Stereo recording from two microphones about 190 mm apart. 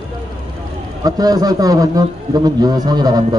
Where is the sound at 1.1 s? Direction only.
20° right (ahead or behind).